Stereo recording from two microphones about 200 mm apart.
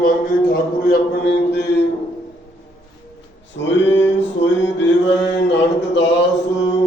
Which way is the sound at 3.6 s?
65° left (ahead or behind).